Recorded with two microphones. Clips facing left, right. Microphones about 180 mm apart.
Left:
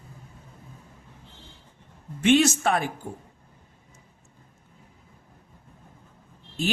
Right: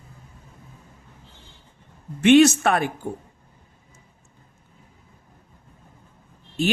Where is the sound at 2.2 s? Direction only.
65° right (ahead or behind).